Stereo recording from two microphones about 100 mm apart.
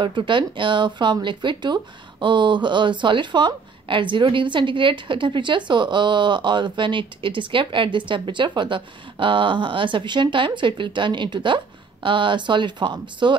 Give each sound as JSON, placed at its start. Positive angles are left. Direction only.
{"t": 0.0, "sound": "speech", "side_deg": -50}